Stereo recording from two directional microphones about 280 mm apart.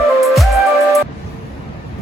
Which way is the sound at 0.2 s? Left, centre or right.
Centre.